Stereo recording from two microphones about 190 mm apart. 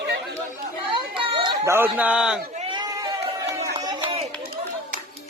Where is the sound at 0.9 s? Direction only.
25° right (ahead or behind).